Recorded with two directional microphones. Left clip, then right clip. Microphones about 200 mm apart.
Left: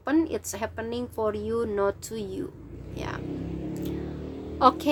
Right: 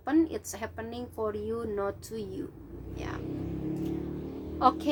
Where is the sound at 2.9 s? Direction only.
35° left (ahead or behind).